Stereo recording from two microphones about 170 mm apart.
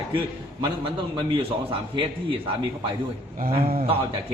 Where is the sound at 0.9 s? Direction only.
30° right (ahead or behind).